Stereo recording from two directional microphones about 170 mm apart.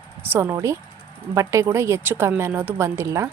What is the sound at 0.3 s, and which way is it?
Speech, 15° right (ahead or behind).